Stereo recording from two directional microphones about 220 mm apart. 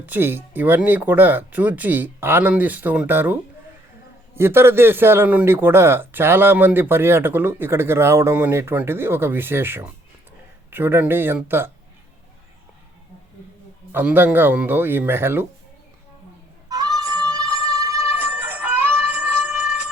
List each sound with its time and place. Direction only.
0.0 s speech: 10° right (ahead or behind)
4.4 s speech: 10° right (ahead or behind)
13.9 s speech: 10° right (ahead or behind)
16.6 s music: 15° right (ahead or behind)